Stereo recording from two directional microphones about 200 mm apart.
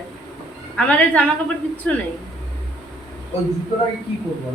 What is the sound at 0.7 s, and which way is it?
Speech, 5° left (ahead or behind).